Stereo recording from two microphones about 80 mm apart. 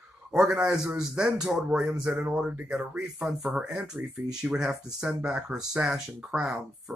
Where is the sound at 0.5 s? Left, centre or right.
Centre.